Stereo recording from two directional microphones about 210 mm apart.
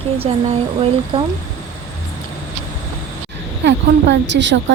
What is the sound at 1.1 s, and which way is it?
Speech, 25° right (ahead or behind).